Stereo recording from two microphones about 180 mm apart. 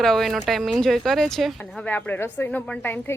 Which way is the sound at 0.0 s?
Centre (ahead or behind).